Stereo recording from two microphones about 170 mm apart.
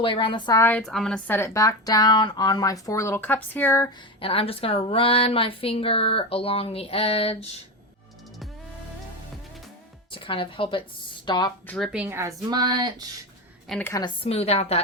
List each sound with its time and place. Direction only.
0.0 s speech: 30° left (ahead or behind)
0.6 s a woman's voice: 5° left (ahead or behind)
1.4 s speech: 15° left (ahead or behind)
4.2 s speech: 35° left (ahead or behind)
10.1 s speech: 30° left (ahead or behind)
11.7 s speech: centre (ahead or behind); by 13.1 s 25° right (ahead or behind)
13.7 s a woman's voice: 10° left (ahead or behind)
13.9 s speech: 30° left (ahead or behind)